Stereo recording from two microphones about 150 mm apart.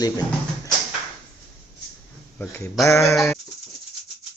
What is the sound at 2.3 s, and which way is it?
Speech, 10° left (ahead or behind).